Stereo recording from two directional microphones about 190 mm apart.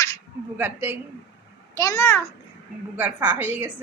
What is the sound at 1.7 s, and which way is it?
Speech, 15° left (ahead or behind).